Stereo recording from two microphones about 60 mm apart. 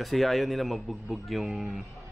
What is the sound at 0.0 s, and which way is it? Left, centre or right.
A man's voice, centre.